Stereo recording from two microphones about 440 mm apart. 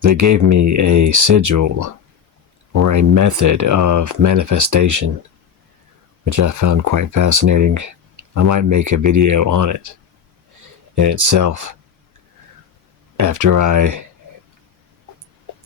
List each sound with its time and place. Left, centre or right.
0.0 s speech: right
6.2 s speech: right
10.9 s speech: right
13.1 s speech: right